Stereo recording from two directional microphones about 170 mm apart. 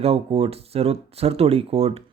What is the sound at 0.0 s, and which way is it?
Speech, 35° right (ahead or behind).